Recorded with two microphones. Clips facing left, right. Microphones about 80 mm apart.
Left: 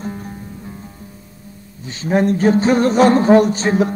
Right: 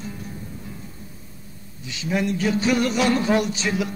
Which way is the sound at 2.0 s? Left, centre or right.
Left.